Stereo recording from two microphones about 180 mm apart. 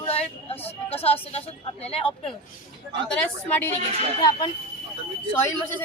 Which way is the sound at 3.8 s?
35° right (ahead or behind).